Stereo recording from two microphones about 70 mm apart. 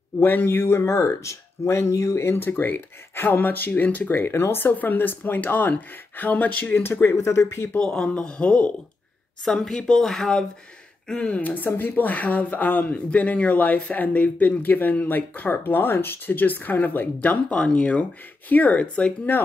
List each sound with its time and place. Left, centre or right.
0.2 s speech: left
4.2 s speech: left
7.8 s speech: centre